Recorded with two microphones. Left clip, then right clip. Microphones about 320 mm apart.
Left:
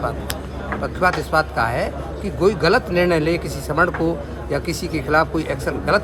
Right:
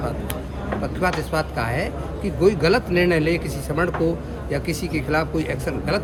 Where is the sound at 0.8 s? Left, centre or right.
Centre.